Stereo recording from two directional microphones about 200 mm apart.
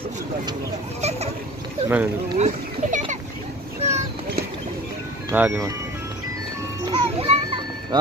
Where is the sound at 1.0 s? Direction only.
35° right (ahead or behind).